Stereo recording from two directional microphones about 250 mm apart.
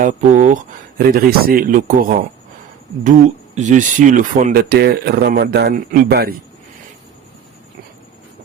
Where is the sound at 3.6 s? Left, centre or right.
Right.